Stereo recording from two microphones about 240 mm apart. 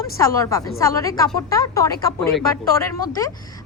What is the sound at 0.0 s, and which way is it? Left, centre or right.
Speech, centre.